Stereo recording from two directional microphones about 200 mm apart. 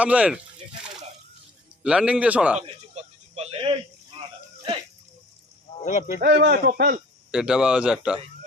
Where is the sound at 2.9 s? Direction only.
30° right (ahead or behind).